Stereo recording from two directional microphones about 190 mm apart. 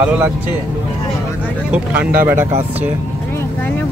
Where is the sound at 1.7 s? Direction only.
10° right (ahead or behind).